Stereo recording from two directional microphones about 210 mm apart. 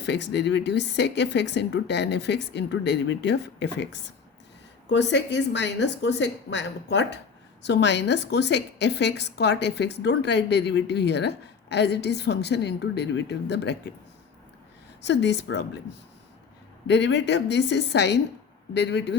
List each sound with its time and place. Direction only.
0.0 s speech: 55° left (ahead or behind)
4.9 s a woman's voice: 55° left (ahead or behind)
15.0 s speech: 55° left (ahead or behind)
16.8 s speech: 55° left (ahead or behind)